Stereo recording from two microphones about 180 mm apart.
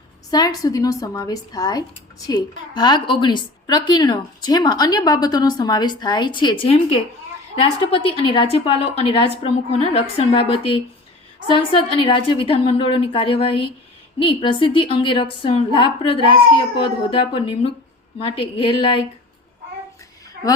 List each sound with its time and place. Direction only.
0.3 s a woman's voice: 20° left (ahead or behind)
20.4 s speech: 60° right (ahead or behind)